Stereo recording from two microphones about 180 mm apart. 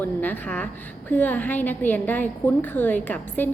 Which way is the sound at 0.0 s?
10° left (ahead or behind).